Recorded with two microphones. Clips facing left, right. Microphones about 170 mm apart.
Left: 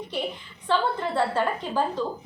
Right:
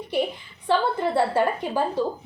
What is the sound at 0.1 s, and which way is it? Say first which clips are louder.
A woman's voice: right 7 dB; 10° right (ahead or behind).